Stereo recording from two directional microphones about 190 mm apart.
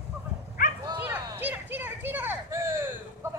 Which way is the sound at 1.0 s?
10° right (ahead or behind).